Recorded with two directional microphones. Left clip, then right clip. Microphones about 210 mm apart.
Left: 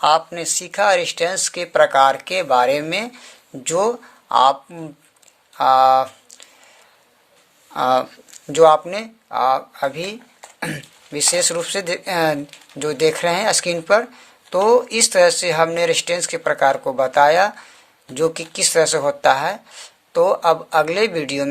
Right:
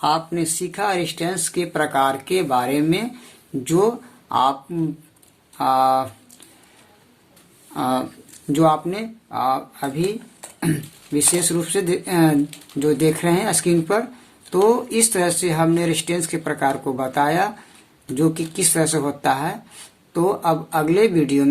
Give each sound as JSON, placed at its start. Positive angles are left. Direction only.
{"t": 0.0, "sound": "speech", "side_deg": 45}
{"t": 7.7, "sound": "speech", "side_deg": 45}